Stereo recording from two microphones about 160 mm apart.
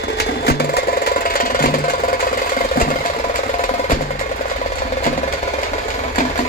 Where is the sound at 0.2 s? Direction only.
75° left (ahead or behind).